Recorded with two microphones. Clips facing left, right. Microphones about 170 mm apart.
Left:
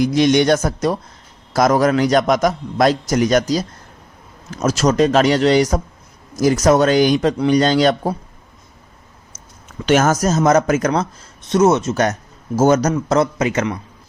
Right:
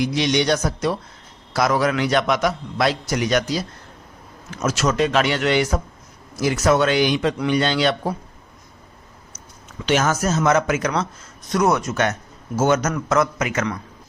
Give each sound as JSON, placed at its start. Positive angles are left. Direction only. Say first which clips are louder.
{"t": 0.0, "sound": "a man's voice", "louder": "left 6 dB", "side_deg": 45}
{"t": 9.8, "sound": "a man's voice", "louder": "left 5 dB", "side_deg": 45}
{"t": 11.4, "sound": "a man's voice", "louder": "left 5 dB", "side_deg": 25}